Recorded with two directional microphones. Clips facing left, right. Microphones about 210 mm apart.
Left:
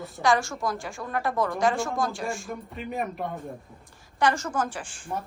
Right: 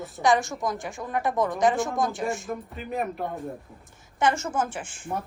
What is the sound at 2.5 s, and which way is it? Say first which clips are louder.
Speech: right 2 dB; centre (ahead or behind).